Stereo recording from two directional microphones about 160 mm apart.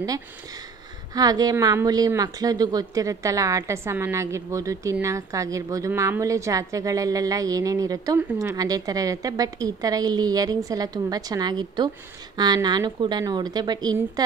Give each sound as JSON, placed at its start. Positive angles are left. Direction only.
{"t": 1.1, "sound": "a woman's voice", "side_deg": -25}